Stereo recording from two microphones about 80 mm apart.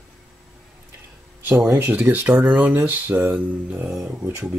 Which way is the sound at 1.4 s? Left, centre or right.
Right.